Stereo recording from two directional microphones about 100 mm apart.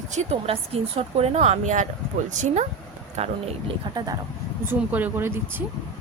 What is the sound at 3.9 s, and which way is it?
Speech, 50° right (ahead or behind).